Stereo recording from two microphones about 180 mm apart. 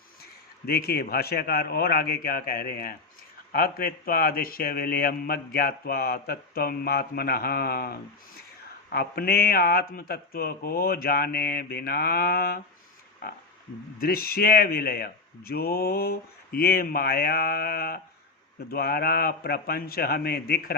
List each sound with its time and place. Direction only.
0.6 s a man's voice: 60° left (ahead or behind)
13.2 s a sound: 60° left (ahead or behind)
14.0 s a man's voice: 55° left (ahead or behind)